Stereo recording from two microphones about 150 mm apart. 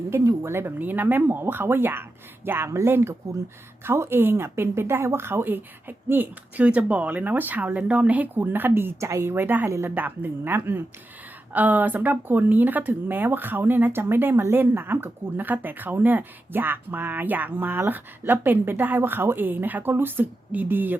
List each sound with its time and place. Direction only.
0.1 s speech: 15° right (ahead or behind)